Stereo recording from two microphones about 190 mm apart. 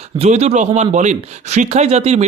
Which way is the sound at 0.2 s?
35° right (ahead or behind).